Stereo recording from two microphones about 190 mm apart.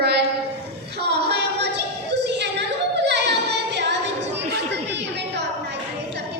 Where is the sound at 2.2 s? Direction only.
65° right (ahead or behind).